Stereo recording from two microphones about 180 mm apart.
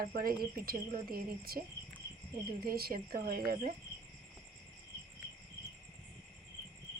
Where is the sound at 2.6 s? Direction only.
55° right (ahead or behind).